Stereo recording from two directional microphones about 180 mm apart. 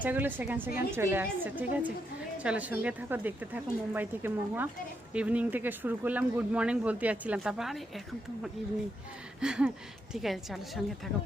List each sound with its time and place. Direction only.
0.0 s speech: 10° right (ahead or behind)
9.4 s a woman's voice: 5° right (ahead or behind)